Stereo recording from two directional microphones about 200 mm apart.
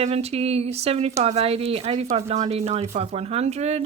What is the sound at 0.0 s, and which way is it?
Speech, 30° right (ahead or behind).